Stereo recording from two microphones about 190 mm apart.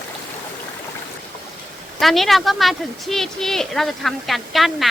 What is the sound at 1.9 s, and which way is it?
A woman's voice, centre (ahead or behind).